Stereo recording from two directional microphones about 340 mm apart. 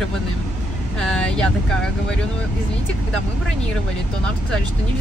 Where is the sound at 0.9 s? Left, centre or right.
Centre.